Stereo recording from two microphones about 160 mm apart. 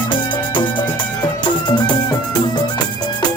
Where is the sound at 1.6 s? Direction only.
25° left (ahead or behind).